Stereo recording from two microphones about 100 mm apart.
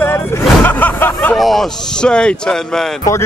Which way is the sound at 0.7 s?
20° left (ahead or behind).